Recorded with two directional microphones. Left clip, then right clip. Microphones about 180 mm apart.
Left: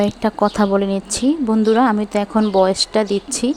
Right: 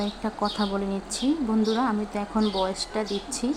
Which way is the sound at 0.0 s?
45° left (ahead or behind).